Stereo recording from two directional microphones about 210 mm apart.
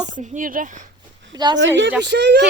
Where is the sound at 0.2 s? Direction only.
35° right (ahead or behind).